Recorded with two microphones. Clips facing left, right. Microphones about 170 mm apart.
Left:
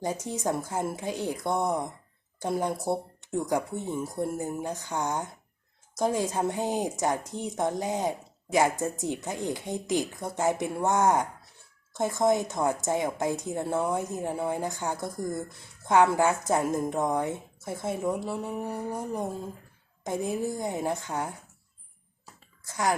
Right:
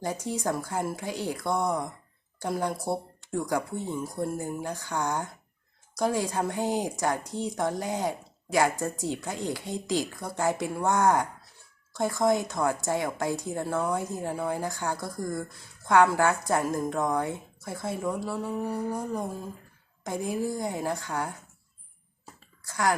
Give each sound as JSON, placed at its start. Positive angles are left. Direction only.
{"t": 0.0, "sound": "a woman's voice", "side_deg": 20}
{"t": 22.6, "sound": "speech", "side_deg": 20}